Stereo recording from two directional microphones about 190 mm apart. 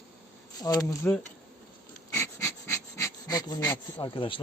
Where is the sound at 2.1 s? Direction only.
15° left (ahead or behind).